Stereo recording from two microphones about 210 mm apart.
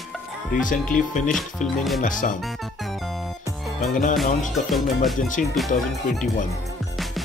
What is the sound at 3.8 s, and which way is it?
Speech, 35° left (ahead or behind).